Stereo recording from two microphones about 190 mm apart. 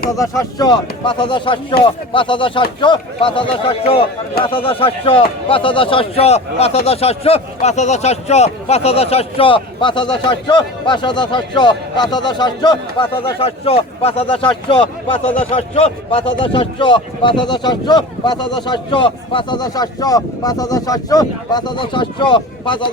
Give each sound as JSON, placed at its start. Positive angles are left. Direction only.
{"t": 0.2, "sound": "speech", "side_deg": 20}